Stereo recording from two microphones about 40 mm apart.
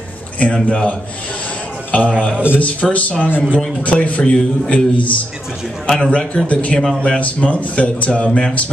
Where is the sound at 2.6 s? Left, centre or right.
Left.